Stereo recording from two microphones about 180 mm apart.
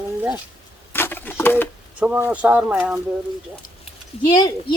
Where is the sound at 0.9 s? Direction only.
10° left (ahead or behind).